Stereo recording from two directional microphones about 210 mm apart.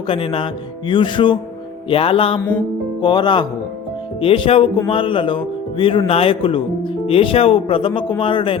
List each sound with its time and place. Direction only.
0.1 s speech: 25° left (ahead or behind)